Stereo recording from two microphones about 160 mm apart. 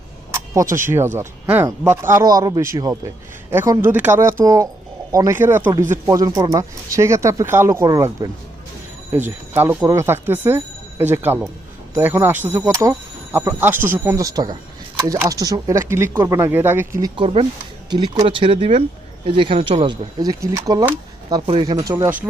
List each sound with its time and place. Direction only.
0.3 s speech: 20° right (ahead or behind)
17.2 s speech: 35° right (ahead or behind); by 22.1 s 20° right (ahead or behind)